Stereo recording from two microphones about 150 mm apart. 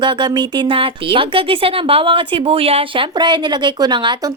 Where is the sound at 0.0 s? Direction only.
30° right (ahead or behind).